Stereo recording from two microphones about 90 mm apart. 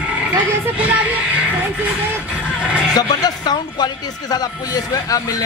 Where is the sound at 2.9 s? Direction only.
50° left (ahead or behind).